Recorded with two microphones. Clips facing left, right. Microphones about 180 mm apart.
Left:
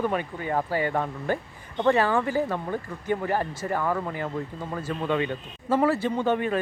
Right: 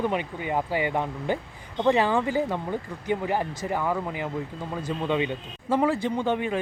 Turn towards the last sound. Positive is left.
turn(degrees=-15)  # may be behind; listen again after turning